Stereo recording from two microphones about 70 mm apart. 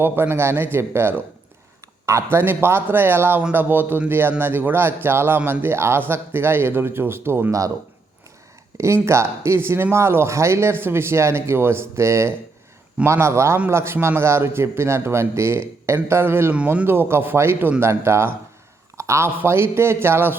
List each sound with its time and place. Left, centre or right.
0.0 s speech: right
9.0 s speech: right
18.9 s a sound: right
19.4 s speech: right